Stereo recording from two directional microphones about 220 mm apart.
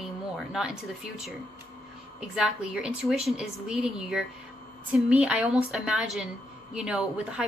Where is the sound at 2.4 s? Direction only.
5° right (ahead or behind).